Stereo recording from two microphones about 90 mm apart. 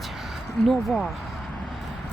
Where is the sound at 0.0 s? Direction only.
Centre (ahead or behind).